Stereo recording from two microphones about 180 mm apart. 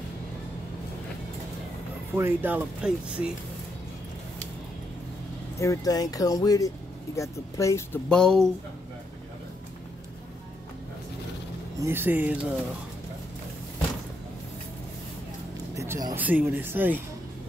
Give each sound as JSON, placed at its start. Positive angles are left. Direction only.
{"t": 2.1, "sound": "speech", "side_deg": -10}
{"t": 5.6, "sound": "speech", "side_deg": 20}
{"t": 8.1, "sound": "speech", "side_deg": 5}
{"t": 11.8, "sound": "speech", "side_deg": -10}
{"t": 15.7, "sound": "a sound", "side_deg": -15}
{"t": 16.2, "sound": "speech", "side_deg": -10}